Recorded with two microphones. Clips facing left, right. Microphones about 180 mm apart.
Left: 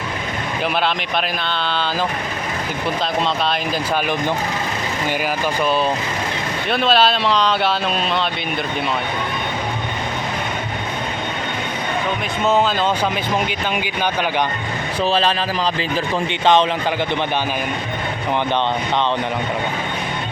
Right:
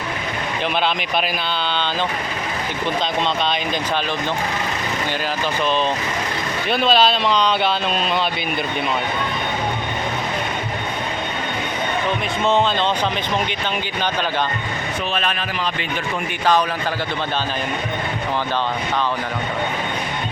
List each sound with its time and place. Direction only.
6.7 s speech: centre (ahead or behind)
13.5 s speech: 10° left (ahead or behind)
15.1 s a man's voice: 30° left (ahead or behind)